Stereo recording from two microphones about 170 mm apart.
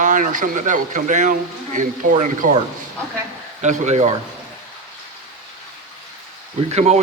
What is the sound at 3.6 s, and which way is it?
Speech, 45° right (ahead or behind).